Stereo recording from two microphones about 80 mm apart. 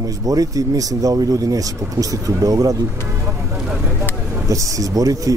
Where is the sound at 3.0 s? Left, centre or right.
Right.